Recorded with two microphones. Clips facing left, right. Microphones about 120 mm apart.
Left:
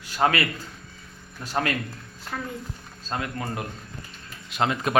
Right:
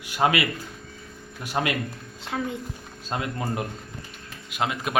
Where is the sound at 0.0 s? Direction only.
15° right (ahead or behind).